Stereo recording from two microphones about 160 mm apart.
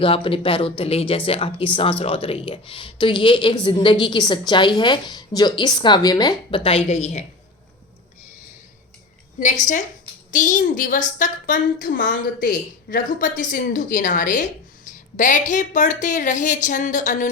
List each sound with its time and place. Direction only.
0.0 s speech: 35° left (ahead or behind)
9.4 s a woman's voice: 50° left (ahead or behind)
11.9 s a woman's voice: 75° left (ahead or behind); by 17.2 s 50° left (ahead or behind)